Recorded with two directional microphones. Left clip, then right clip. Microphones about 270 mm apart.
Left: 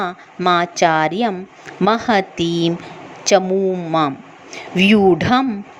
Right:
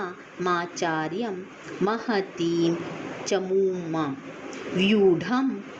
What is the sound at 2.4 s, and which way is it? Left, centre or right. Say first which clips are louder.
Speech: left 6 dB; left.